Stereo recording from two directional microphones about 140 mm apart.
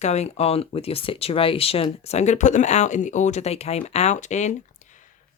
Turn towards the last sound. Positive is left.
turn(degrees=55)  # may be behind; listen again after turning